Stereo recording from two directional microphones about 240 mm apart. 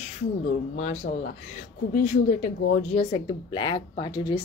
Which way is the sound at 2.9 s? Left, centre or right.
Left.